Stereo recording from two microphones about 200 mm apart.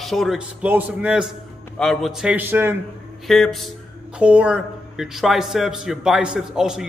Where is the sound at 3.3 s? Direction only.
Centre (ahead or behind).